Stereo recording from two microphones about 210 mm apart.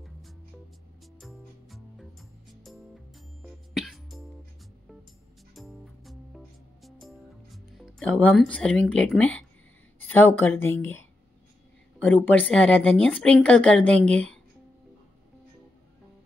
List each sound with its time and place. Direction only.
1.2 s music: centre (ahead or behind)
5.5 s music: centre (ahead or behind)
9.9 s speech: 10° left (ahead or behind)